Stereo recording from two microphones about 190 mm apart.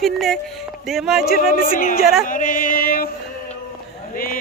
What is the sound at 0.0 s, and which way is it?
Speech, centre (ahead or behind).